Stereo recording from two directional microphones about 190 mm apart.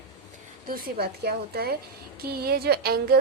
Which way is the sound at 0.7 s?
55° right (ahead or behind).